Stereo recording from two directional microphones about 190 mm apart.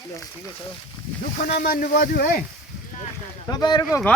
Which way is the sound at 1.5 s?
45° left (ahead or behind).